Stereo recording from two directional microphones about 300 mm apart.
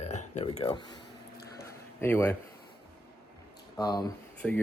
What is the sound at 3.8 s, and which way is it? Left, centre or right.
Speech, centre.